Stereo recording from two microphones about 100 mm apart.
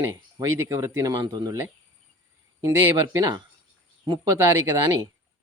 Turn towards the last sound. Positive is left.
turn(degrees=-35)  # may be behind; listen again after turning